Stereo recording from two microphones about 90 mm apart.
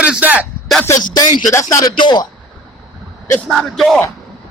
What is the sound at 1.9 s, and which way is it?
Speech, 60° left (ahead or behind).